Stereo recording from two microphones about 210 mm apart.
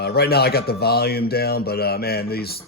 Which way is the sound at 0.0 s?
50° left (ahead or behind).